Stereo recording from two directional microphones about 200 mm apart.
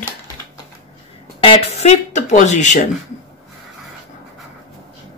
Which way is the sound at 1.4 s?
30° left (ahead or behind).